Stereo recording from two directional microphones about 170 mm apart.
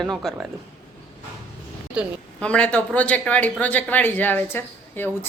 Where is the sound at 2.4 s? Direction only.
5° left (ahead or behind).